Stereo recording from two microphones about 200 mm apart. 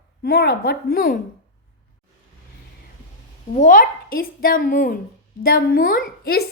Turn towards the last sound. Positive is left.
turn(degrees=50)  # may be behind; listen again after turning